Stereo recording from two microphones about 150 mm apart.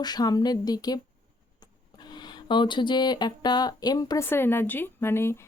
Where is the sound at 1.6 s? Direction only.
30° left (ahead or behind).